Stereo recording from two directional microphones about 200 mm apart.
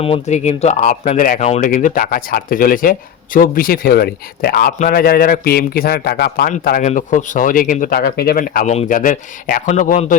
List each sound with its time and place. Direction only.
0.0 s a man's voice: 30° left (ahead or behind)